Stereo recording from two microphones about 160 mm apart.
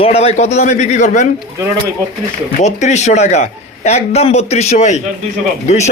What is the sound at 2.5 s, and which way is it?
A man's voice, 45° left (ahead or behind).